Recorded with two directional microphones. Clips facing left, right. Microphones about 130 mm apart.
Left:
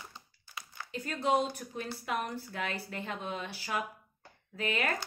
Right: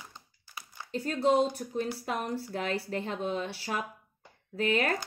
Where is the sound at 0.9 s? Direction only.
35° right (ahead or behind).